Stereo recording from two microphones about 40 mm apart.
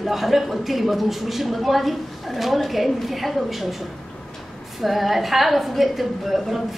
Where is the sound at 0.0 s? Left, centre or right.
Centre.